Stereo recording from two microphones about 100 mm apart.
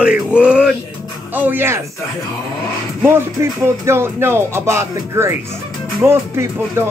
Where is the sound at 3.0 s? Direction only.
25° right (ahead or behind).